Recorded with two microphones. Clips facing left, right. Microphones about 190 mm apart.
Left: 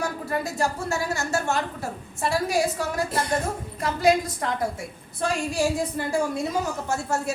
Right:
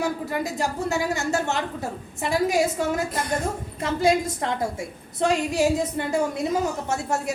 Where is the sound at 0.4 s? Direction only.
15° right (ahead or behind).